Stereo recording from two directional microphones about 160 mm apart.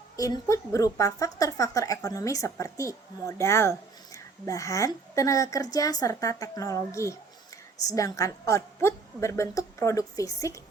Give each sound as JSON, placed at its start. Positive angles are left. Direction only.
{"t": 0.2, "sound": "a woman's voice", "side_deg": 20}